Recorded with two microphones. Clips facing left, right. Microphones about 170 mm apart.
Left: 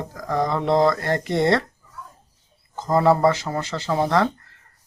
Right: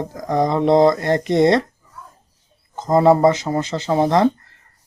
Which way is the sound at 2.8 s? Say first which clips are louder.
Right 4 dB; 20° right (ahead or behind).